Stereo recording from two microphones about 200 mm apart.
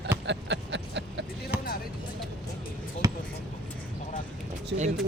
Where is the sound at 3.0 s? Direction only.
15° right (ahead or behind).